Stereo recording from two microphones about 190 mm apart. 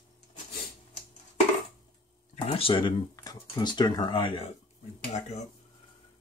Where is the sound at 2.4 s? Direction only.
30° left (ahead or behind).